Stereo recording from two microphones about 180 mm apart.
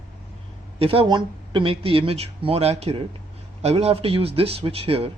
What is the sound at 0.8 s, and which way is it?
Speech, 30° right (ahead or behind).